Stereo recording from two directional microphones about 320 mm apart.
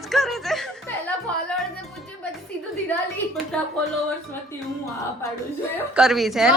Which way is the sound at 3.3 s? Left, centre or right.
Centre.